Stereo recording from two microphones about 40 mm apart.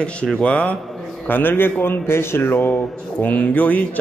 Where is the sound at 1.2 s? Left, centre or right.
Left.